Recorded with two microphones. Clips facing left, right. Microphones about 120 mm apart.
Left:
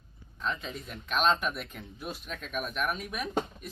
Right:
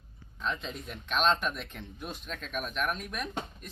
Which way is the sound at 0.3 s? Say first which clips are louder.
Even; centre (ahead or behind).